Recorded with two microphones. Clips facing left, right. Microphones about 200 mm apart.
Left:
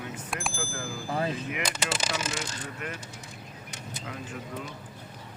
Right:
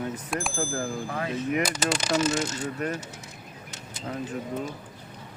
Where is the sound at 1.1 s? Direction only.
30° left (ahead or behind).